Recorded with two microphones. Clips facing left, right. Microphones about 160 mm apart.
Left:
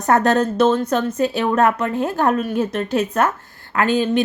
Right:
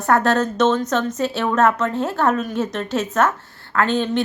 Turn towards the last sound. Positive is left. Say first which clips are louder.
# left 2 dB
turn(degrees=10)  # may be behind; listen again after turning